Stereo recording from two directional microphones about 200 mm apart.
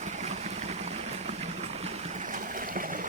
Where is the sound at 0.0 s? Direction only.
35° right (ahead or behind).